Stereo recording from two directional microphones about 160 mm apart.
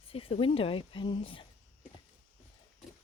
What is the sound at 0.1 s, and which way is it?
Speech, 35° left (ahead or behind).